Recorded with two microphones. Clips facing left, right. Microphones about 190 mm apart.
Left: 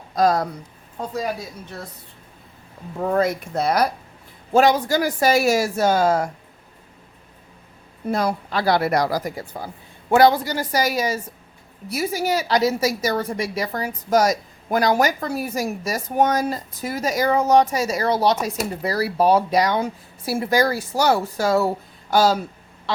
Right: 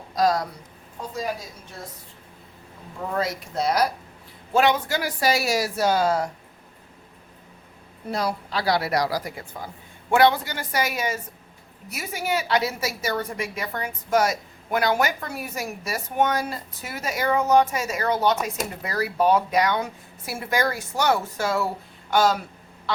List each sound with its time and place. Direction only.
0.1 s speech: 50° left (ahead or behind)
3.0 s speech: 55° left (ahead or behind)
4.5 s speech: 40° left (ahead or behind)
8.1 s a woman's voice: 50° left (ahead or behind); by 22.4 s 35° left (ahead or behind)